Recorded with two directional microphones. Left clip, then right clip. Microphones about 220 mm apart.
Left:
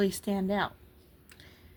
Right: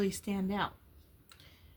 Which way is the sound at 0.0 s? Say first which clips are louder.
Left 5 dB; 30° left (ahead or behind).